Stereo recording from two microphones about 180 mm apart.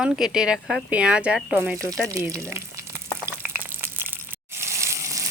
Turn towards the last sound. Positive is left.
turn(degrees=-15)  # may be behind; listen again after turning